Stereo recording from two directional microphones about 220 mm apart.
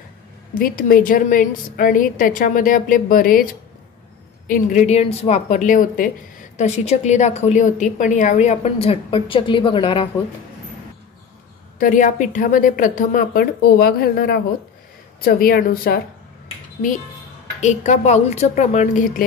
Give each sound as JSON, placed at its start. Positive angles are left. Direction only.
{"t": 0.6, "sound": "a woman's voice", "side_deg": 40}
{"t": 4.5, "sound": "a woman's voice", "side_deg": 35}
{"t": 11.8, "sound": "a woman's voice", "side_deg": 35}
{"t": 17.6, "sound": "a woman's voice", "side_deg": 30}